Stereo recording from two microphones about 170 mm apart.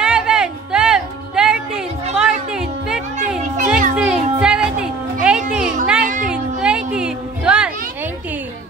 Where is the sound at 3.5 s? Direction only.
50° right (ahead or behind).